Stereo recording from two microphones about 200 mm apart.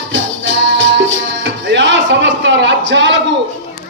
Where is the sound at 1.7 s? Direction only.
60° right (ahead or behind).